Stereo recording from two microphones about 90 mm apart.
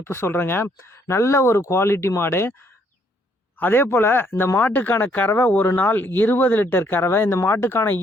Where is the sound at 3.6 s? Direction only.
25° left (ahead or behind).